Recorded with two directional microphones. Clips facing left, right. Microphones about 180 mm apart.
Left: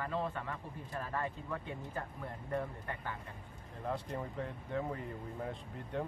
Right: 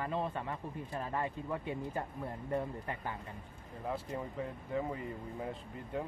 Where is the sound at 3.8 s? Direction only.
5° right (ahead or behind).